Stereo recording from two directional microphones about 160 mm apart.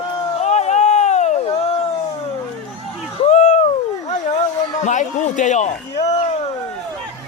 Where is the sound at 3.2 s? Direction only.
45° left (ahead or behind).